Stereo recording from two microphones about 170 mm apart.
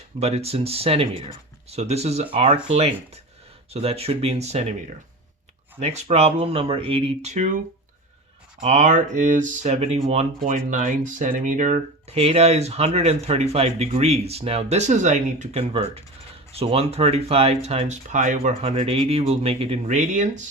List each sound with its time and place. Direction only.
0.2 s speech: 35° right (ahead or behind)
5.8 s speech: 40° right (ahead or behind)
8.6 s speech: 45° right (ahead or behind)
18.6 s speech: 35° right (ahead or behind)